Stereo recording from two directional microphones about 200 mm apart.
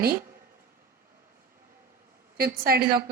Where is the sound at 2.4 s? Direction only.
50° right (ahead or behind).